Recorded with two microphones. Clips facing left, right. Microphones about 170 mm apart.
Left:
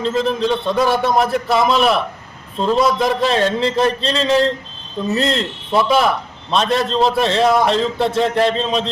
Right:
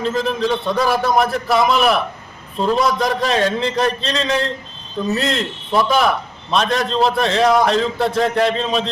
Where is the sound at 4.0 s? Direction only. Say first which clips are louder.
Left 2 dB; 35° left (ahead or behind).